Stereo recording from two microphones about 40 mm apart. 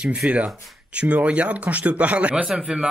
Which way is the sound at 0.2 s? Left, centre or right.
Right.